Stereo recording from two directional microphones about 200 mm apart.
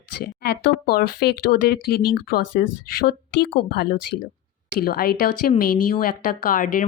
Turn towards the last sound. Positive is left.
turn(degrees=45)  # may be behind; listen again after turning